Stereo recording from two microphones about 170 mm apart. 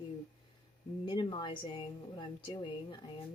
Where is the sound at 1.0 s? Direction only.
30° left (ahead or behind).